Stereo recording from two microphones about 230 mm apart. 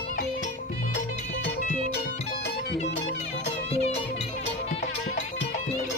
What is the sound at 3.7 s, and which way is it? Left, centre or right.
Music, left.